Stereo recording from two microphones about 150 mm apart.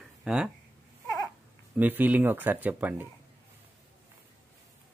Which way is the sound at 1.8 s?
10° right (ahead or behind).